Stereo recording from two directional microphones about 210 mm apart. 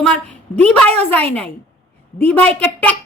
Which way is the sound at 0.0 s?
5° left (ahead or behind).